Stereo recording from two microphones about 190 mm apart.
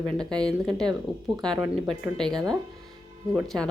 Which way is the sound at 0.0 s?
5° left (ahead or behind).